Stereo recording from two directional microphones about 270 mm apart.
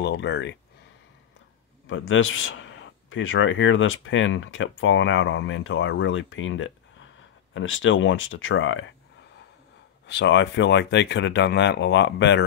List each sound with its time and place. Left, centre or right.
0.0 s speech: left
1.9 s speech: left
10.0 s speech: left